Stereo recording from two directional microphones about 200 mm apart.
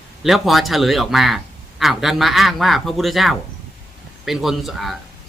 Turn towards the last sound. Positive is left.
turn(degrees=0)  # may be behind; listen again after turning